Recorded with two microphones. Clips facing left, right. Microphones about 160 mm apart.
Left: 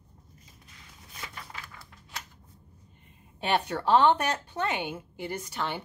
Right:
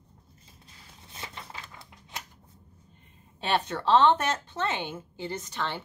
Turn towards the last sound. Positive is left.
turn(degrees=10)  # may be behind; listen again after turning